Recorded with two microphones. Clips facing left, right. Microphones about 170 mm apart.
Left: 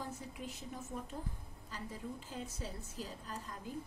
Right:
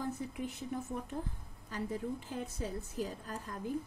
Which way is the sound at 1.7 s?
60° right (ahead or behind).